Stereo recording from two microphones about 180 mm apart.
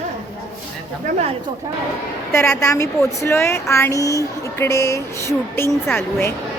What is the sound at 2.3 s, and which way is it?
Speech, 15° left (ahead or behind).